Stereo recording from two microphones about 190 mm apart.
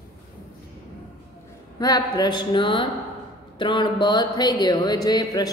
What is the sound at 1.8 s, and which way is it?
Speech, 20° left (ahead or behind).